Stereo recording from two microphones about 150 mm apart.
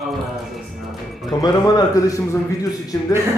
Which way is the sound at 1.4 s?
25° left (ahead or behind).